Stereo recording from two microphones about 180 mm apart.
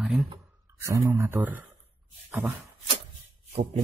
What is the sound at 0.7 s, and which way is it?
Speech, 15° right (ahead or behind).